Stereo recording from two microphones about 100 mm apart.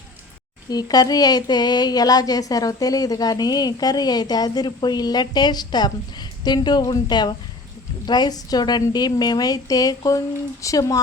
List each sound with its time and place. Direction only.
0.7 s speech: 40° left (ahead or behind)